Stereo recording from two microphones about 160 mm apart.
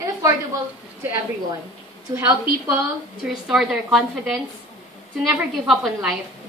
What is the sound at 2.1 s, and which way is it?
Speech, 15° right (ahead or behind).